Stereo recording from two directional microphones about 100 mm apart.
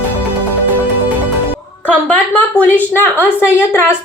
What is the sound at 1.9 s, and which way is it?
A woman's voice, 15° left (ahead or behind).